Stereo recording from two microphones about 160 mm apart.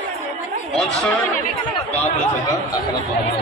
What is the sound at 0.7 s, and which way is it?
Speech, 5° left (ahead or behind).